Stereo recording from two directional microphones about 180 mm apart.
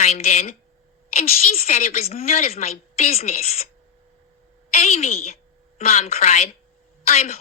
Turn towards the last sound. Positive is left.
turn(degrees=35)  # may be behind; listen again after turning